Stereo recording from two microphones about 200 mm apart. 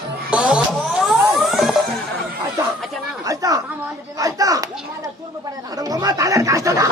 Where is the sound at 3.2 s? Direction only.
15° right (ahead or behind).